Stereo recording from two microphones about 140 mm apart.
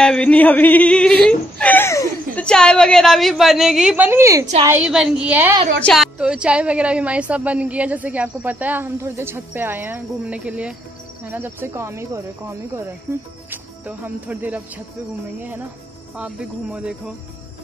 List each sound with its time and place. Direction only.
0.0 s singing: 5° left (ahead or behind)
2.4 s a woman's voice: 5° left (ahead or behind); by 4.5 s 20° right (ahead or behind)
4.8 s a woman's voice: 5° right (ahead or behind)
5.8 s a woman's voice: 5° left (ahead or behind)
6.1 s a woman's voice: 5° right (ahead or behind)
11.2 s cricket: 15° right (ahead or behind)
13.5 s speech: 15° right (ahead or behind)
16.2 s a woman's voice: 10° right (ahead or behind)